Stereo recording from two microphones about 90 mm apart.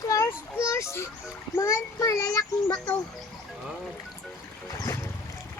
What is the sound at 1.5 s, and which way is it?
Child singing, 35° left (ahead or behind).